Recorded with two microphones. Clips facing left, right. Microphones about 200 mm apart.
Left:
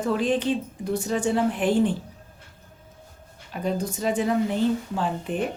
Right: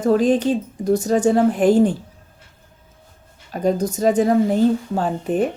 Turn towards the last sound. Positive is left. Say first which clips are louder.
# right 7 dB
turn(degrees=-45)  # may be behind; listen again after turning